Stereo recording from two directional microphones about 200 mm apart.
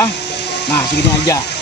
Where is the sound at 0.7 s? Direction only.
15° left (ahead or behind).